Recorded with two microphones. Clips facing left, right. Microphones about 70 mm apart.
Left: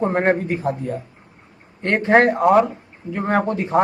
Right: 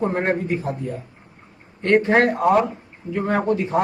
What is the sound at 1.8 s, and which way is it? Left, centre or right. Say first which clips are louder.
A man's voice: left 1 dB; left.